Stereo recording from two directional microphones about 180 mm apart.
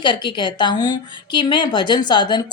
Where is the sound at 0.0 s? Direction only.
25° left (ahead or behind).